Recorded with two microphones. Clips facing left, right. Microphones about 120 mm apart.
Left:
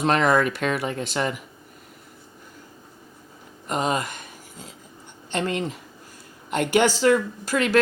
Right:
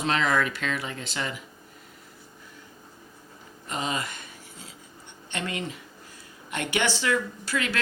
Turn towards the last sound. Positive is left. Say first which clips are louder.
# left 8 dB
turn(degrees=45)  # may be behind; listen again after turning